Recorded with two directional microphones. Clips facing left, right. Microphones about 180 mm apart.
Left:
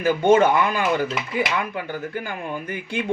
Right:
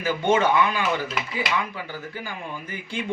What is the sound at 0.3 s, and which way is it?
Speech, 45° left (ahead or behind).